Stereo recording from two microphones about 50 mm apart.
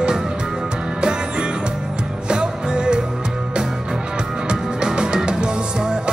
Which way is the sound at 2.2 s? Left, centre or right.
Centre.